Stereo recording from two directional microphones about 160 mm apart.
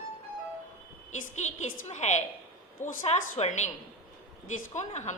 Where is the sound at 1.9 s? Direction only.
45° left (ahead or behind).